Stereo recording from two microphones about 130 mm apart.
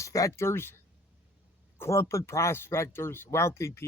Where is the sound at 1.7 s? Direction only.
20° left (ahead or behind).